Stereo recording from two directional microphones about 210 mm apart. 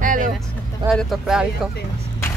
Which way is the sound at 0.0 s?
40° right (ahead or behind).